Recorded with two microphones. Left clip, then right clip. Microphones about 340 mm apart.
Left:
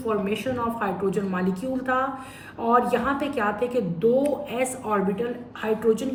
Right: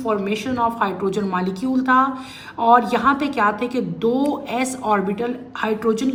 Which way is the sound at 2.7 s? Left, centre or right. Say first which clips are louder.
Right 6 dB; centre.